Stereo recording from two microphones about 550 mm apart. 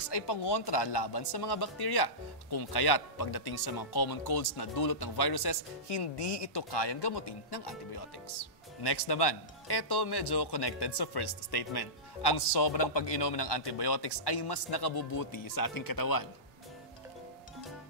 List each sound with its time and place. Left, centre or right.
0.0 s speech: left